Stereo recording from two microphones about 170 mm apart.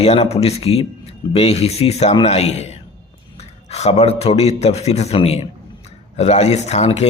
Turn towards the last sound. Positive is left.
turn(degrees=40)  # may be behind; listen again after turning